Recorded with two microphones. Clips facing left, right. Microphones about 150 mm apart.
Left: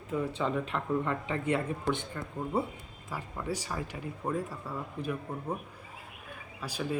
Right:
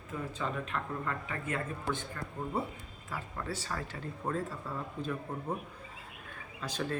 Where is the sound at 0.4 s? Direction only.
20° left (ahead or behind).